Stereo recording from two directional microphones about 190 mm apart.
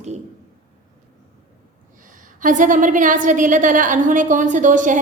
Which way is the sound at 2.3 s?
45° right (ahead or behind).